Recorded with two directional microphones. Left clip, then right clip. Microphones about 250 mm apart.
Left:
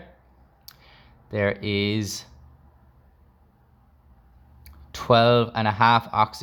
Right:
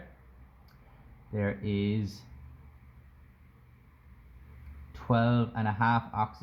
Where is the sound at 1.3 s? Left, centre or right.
Left.